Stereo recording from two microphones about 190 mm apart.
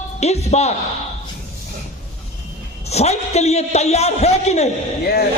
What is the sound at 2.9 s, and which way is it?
A man's voice, 35° left (ahead or behind).